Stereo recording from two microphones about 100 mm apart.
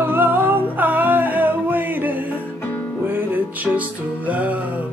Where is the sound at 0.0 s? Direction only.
20° right (ahead or behind).